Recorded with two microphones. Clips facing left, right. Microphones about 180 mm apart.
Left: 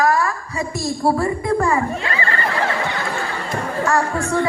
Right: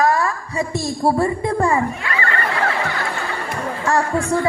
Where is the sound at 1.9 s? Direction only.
25° left (ahead or behind).